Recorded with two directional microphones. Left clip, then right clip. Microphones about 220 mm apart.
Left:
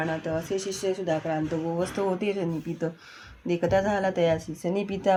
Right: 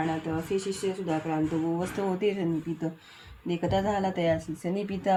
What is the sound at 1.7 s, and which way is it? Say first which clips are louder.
Speech: left 3 dB; 30° left (ahead or behind).